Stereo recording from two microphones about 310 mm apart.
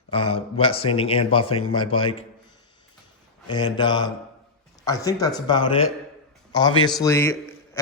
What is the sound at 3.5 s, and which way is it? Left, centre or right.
Speech, centre.